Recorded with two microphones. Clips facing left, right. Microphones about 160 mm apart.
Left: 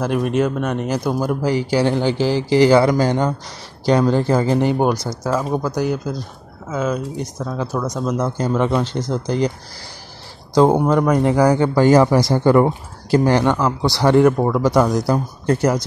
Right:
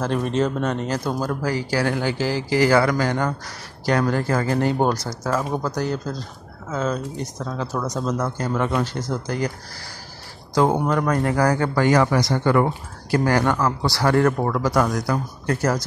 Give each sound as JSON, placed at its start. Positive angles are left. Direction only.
{"t": 0.0, "sound": "speech", "side_deg": 10}
{"t": 10.5, "sound": "speech", "side_deg": 25}